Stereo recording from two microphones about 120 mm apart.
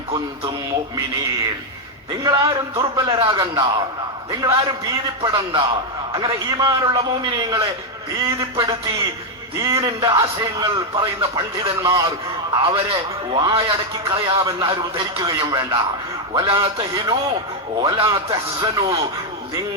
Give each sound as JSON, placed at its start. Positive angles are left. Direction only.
{"t": 2.2, "sound": "a man's voice", "side_deg": -35}
{"t": 9.6, "sound": "a man's voice", "side_deg": -30}
{"t": 15.2, "sound": "a man's voice", "side_deg": -30}